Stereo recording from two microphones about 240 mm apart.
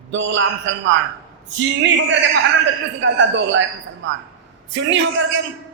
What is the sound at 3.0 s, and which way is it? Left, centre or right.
Speech, right.